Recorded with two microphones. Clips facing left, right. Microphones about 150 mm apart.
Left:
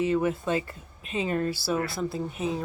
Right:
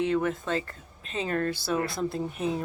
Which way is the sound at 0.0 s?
5° left (ahead or behind).